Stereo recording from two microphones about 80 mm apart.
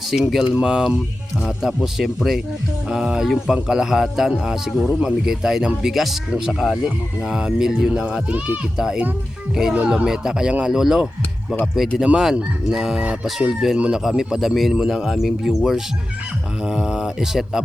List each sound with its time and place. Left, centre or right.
0.1 s speech: centre